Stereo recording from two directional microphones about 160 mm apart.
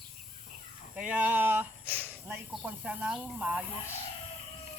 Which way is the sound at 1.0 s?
10° right (ahead or behind).